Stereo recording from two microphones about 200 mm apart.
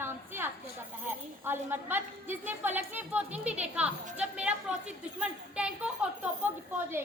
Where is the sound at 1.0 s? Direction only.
10° right (ahead or behind).